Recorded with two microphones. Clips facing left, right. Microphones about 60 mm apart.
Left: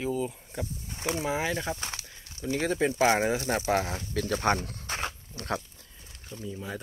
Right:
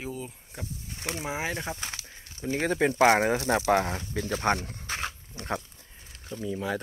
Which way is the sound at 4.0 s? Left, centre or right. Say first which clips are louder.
Left 1 dB; right.